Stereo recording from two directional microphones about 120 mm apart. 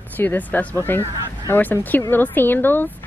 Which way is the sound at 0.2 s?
15° left (ahead or behind).